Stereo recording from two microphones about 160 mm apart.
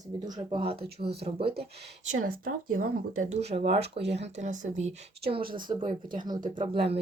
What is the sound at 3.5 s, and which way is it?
Speech, 40° right (ahead or behind).